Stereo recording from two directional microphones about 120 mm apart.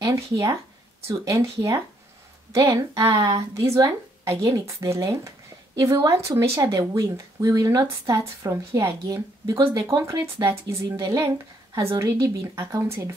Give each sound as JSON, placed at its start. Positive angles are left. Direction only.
{"t": 0.0, "sound": "speech", "side_deg": -25}